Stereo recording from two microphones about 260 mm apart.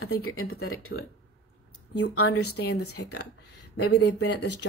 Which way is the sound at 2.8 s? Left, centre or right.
Left.